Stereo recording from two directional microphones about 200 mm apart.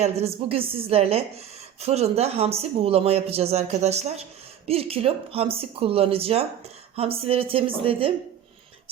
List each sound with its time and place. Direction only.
0.0 s speech: 30° right (ahead or behind)